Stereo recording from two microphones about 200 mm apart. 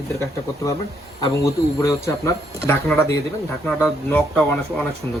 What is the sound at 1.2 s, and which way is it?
Speech, 15° left (ahead or behind).